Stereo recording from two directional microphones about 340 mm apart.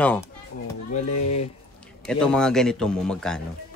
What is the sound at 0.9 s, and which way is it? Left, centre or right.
Speech, centre.